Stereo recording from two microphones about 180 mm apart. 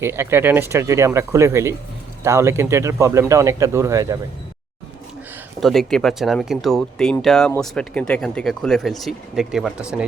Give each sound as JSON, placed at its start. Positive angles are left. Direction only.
{"t": 0.0, "sound": "speech", "side_deg": -15}
{"t": 5.5, "sound": "speech", "side_deg": 0}